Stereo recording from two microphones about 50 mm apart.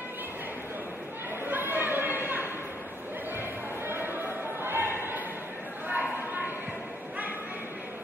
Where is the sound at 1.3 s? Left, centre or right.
Right.